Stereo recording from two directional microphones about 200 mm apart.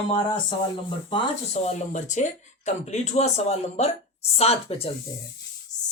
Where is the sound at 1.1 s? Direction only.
35° left (ahead or behind).